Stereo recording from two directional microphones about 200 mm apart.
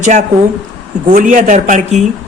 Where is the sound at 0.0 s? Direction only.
35° right (ahead or behind).